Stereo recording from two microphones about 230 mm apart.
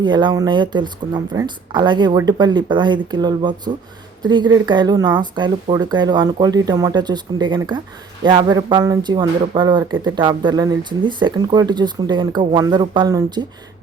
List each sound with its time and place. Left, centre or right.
0.0 s speech: centre